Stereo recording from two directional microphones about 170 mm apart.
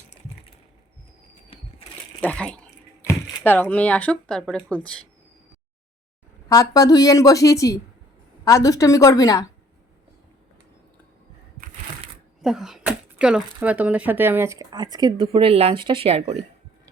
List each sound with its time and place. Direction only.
2.2 s speech: 5° left (ahead or behind)
6.5 s a woman's voice: 20° left (ahead or behind)
12.4 s speech: centre (ahead or behind); by 16.2 s 35° right (ahead or behind)